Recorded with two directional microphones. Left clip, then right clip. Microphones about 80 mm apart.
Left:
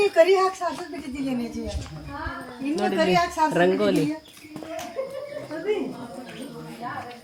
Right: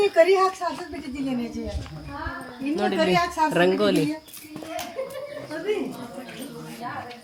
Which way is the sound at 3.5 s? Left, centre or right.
Right.